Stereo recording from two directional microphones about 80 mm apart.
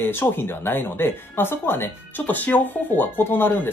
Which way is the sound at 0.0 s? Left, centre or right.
Left.